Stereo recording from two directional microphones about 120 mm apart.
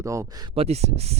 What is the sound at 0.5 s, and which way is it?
Speech, 60° right (ahead or behind).